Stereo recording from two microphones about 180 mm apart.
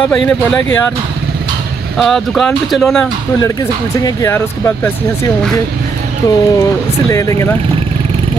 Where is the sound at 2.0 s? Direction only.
Centre (ahead or behind).